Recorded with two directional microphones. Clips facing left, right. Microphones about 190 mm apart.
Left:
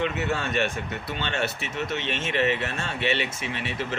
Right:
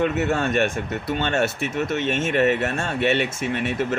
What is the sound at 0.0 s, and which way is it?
Speech, 50° right (ahead or behind).